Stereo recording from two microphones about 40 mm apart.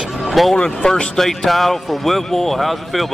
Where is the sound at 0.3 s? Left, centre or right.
Centre.